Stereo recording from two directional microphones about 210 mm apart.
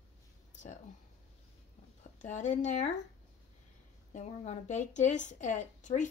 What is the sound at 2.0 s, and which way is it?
Speech, 35° left (ahead or behind).